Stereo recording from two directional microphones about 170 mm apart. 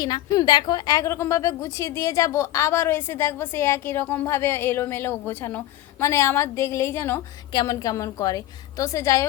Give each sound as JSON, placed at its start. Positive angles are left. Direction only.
{"t": 0.0, "sound": "a woman's voice", "side_deg": 25}